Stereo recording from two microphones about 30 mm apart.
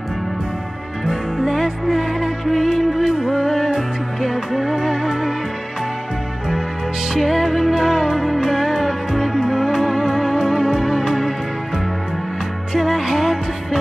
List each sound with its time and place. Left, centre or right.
1.0 s music: centre
4.7 s organ: centre
7.2 s music: centre
12.7 s music: centre